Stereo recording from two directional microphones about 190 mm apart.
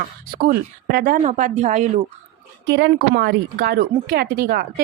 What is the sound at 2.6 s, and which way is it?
A woman's voice, 65° right (ahead or behind).